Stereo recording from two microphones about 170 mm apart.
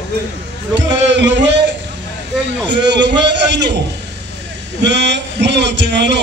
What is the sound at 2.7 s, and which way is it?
A man's voice, 85° right.